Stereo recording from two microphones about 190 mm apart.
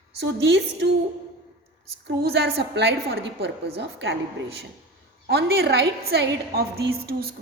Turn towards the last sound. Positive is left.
turn(degrees=-55)  # may be behind; listen again after turning